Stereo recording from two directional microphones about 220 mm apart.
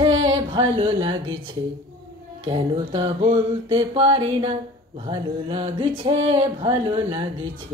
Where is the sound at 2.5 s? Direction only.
25° right (ahead or behind).